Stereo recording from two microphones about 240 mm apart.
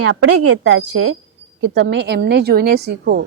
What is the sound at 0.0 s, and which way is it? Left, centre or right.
Speech, right.